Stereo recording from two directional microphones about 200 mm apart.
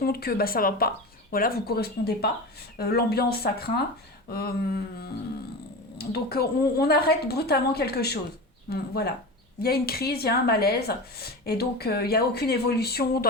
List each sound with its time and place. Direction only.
0.0 s speech: 50° left (ahead or behind)
6.0 s speech: 50° left (ahead or behind)